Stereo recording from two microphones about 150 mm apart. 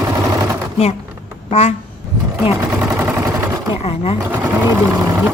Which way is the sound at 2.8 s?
15° right (ahead or behind).